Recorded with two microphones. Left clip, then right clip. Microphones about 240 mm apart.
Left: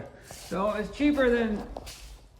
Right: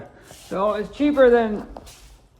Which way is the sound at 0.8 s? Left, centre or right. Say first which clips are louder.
Right 4 dB; centre.